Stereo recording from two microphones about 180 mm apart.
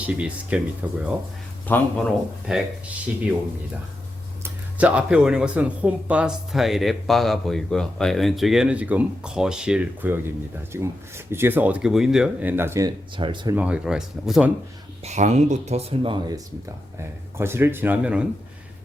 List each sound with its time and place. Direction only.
0.0 s speech: 5° right (ahead or behind)
1.6 s speech: 10° left (ahead or behind)
2.5 s speech: 5° right (ahead or behind)
4.8 s speech: 5° right (ahead or behind)
13.1 s speech: 25° right (ahead or behind)
13.6 s speech: 5° right (ahead or behind)
15.0 s speech: 40° right (ahead or behind); by 18.3 s 5° right (ahead or behind)